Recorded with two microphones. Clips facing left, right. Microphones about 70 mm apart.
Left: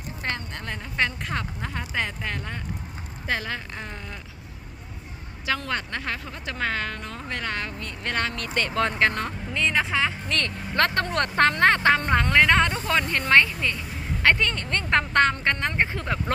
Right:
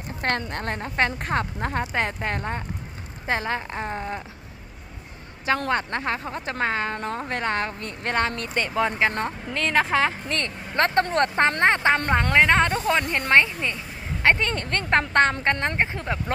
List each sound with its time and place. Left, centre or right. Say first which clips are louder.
0.2 s speech: right 6 dB; right
5.7 s speech: right 5 dB; right
7.0 s speech: right 5 dB; right
8.6 s speech: even; centre
9.5 s speech: right 3 dB; right
10.3 s speech: even; right
15.8 s speech: even; right